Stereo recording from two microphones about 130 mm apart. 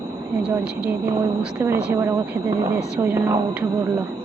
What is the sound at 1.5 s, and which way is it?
Speech, 15° right (ahead or behind).